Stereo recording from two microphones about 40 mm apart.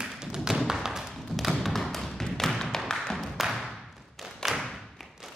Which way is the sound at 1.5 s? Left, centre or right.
Centre.